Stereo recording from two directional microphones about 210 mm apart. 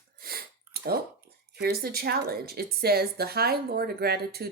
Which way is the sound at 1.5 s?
45° right (ahead or behind).